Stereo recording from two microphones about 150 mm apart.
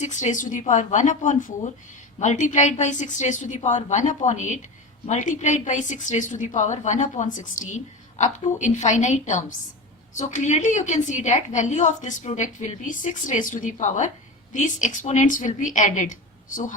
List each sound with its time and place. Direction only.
0.0 s a woman's voice: 55° left (ahead or behind)